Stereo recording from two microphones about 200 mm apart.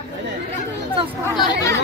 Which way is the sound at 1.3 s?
20° left (ahead or behind).